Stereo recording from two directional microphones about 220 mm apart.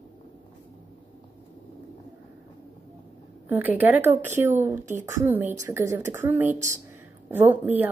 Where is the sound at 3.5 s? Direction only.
10° right (ahead or behind).